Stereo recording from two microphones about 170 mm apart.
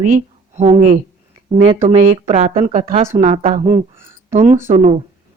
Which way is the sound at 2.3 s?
35° right (ahead or behind).